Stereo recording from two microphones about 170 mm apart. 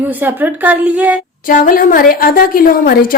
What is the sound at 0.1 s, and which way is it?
A woman's voice, 10° right (ahead or behind).